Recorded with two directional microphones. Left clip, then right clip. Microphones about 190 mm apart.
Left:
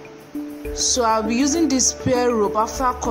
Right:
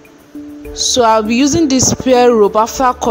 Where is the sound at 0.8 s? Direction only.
45° right (ahead or behind).